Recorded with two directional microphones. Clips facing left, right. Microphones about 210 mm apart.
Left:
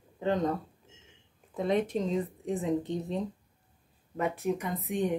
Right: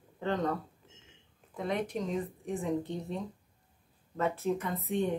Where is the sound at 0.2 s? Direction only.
15° left (ahead or behind).